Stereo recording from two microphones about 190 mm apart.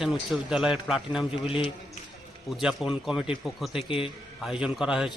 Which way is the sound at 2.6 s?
Centre (ahead or behind).